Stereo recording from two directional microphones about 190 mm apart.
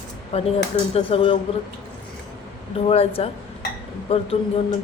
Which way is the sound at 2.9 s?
30° left (ahead or behind).